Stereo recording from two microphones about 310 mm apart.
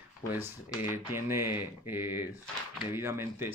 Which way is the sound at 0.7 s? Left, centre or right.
Centre.